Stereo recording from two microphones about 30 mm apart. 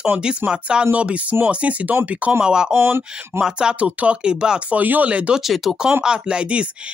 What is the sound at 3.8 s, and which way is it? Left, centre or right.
Speech, right.